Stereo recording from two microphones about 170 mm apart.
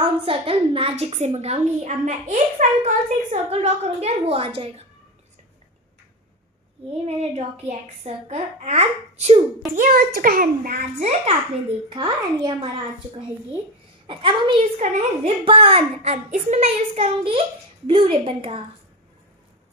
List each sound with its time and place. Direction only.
0.0 s a child's voice: 35° right (ahead or behind)
6.9 s a child's voice: 35° right (ahead or behind)
9.8 s a child's voice: 60° right (ahead or behind)
11.0 s a child's voice: 40° right (ahead or behind)
11.9 s a child's voice: 25° right (ahead or behind)
14.0 s a child's voice: 30° right (ahead or behind)